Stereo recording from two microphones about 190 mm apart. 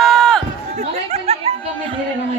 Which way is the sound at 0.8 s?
35° right (ahead or behind).